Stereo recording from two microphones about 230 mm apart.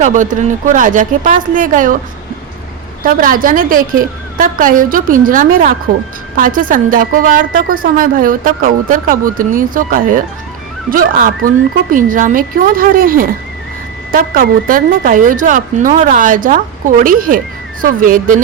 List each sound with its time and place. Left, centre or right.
0.0 s a woman's voice: right
3.0 s a woman's voice: right